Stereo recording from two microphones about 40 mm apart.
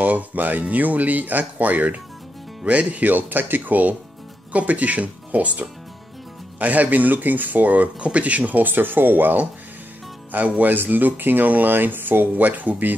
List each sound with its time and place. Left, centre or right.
0.0 s speech: right
2.6 s speech: right
10.6 s speech: right